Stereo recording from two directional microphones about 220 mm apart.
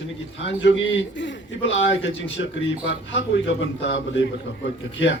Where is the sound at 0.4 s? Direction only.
55° left (ahead or behind).